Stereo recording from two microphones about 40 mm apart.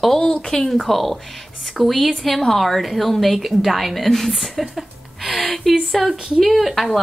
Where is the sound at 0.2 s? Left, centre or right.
Left.